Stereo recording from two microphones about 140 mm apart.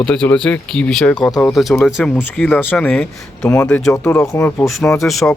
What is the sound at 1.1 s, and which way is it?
Speech, 25° left (ahead or behind).